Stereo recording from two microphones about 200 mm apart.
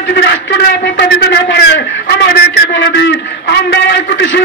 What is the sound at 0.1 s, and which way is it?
A man's voice, 55° left (ahead or behind).